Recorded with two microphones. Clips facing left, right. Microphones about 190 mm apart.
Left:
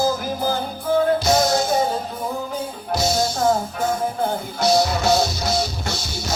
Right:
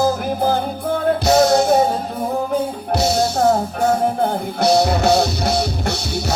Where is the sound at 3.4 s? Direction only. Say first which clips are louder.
Right 4 dB; 60° right (ahead or behind).